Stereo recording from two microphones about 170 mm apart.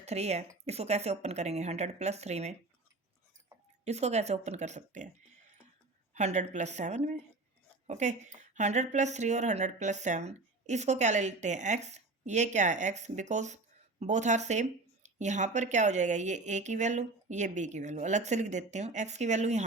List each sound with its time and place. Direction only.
0.0 s speech: 40° right (ahead or behind)
3.8 s speech: 40° right (ahead or behind)
6.1 s a woman's voice: 45° right (ahead or behind)